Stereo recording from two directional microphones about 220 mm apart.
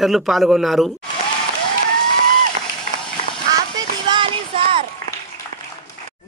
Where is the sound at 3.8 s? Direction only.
20° right (ahead or behind).